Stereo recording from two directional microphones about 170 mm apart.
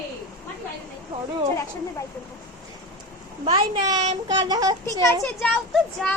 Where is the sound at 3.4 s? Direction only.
35° right (ahead or behind).